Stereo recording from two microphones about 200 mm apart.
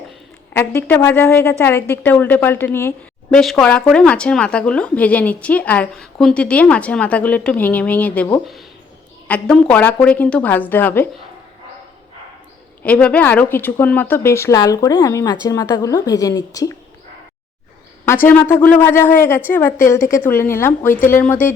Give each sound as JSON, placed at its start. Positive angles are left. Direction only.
{"t": 0.5, "sound": "a woman's voice", "side_deg": 10}
{"t": 12.8, "sound": "a woman's voice", "side_deg": 5}
{"t": 18.0, "sound": "a woman's voice", "side_deg": 10}